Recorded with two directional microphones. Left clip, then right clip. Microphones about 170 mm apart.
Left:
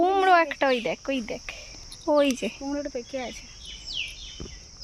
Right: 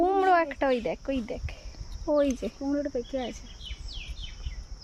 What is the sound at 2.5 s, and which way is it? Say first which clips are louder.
Cricket: right 1 dB; 35° right (ahead or behind).